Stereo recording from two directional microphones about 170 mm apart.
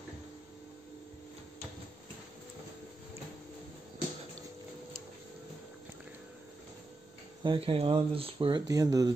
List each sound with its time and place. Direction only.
7.4 s speech: 30° right (ahead or behind)